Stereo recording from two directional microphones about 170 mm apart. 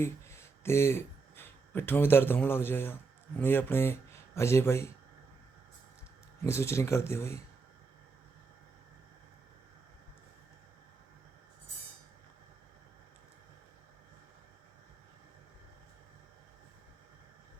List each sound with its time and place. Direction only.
0.0 s speech: 15° left (ahead or behind)
6.4 s speech: 15° left (ahead or behind)